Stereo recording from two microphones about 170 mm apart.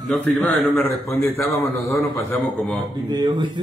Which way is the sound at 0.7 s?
10° left (ahead or behind).